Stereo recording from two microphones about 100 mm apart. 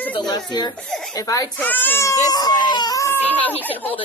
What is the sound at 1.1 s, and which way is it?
Speech, 35° left (ahead or behind).